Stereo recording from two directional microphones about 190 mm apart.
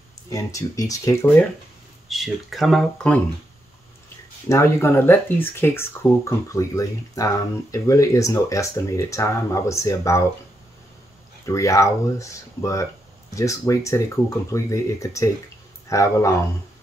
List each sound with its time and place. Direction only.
0.3 s speech: 15° left (ahead or behind)
2.0 s speech: centre (ahead or behind)
4.5 s speech: 15° left (ahead or behind)
11.4 s speech: 15° left (ahead or behind)